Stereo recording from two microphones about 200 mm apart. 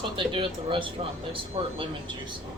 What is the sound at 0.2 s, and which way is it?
Speech, 25° right (ahead or behind).